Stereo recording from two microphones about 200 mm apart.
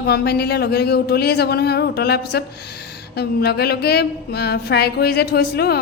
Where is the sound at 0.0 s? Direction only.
55° left (ahead or behind).